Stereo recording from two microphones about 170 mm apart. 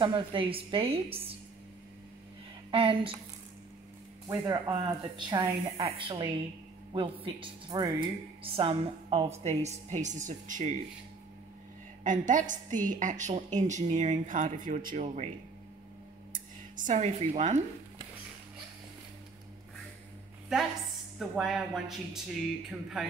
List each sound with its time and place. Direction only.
0.0 s a woman's voice: 30° right (ahead or behind)
2.7 s a woman's voice: 30° right (ahead or behind)
4.3 s a woman's voice: 15° right (ahead or behind); by 10.8 s 45° right (ahead or behind)
12.0 s a woman's voice: 50° right (ahead or behind)
16.3 s speech: 50° right (ahead or behind)
21.2 s speech: centre (ahead or behind)